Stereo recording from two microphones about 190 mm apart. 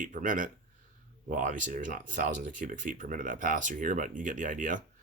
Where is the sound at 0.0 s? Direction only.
45° right (ahead or behind).